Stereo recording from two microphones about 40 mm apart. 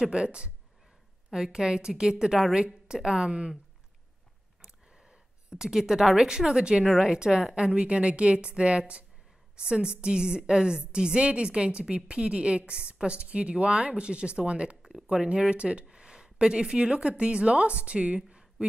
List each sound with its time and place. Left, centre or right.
0.0 s a woman's voice: right
4.6 s a sound: right
6.9 s a woman's voice: centre